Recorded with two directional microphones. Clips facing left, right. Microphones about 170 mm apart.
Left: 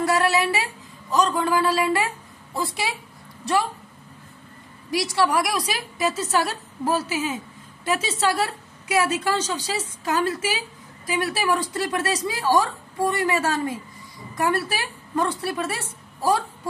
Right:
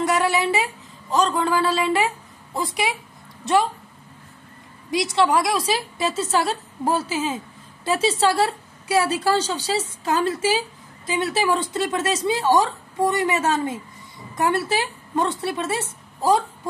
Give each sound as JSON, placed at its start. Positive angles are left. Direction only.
{"t": 0.0, "sound": "a woman's voice", "side_deg": -20}
{"t": 4.9, "sound": "a woman's voice", "side_deg": -20}